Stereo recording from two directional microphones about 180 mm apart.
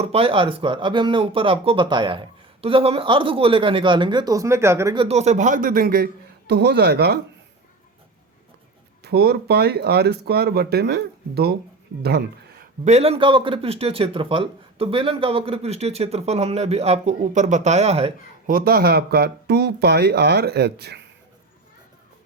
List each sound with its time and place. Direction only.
0.0 s speech: 30° right (ahead or behind); by 4.9 s 15° right (ahead or behind)
4.9 s speech: 35° right (ahead or behind); by 6.1 s 55° right (ahead or behind)
6.5 s speech: 65° right (ahead or behind)
9.0 s speech: 65° right (ahead or behind)
12.8 s speech: 35° right (ahead or behind)
18.4 s speech: 55° right (ahead or behind)